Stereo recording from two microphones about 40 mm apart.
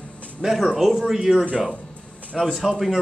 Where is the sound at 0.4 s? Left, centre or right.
Centre.